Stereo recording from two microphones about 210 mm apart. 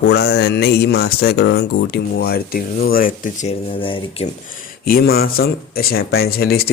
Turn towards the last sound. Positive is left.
turn(degrees=50)  # may be behind; listen again after turning